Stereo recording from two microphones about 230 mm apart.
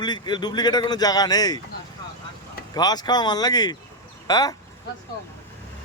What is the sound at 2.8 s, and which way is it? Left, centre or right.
A man's voice, centre.